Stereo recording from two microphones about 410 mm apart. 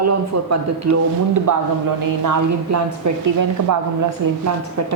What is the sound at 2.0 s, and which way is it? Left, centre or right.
Speech, right.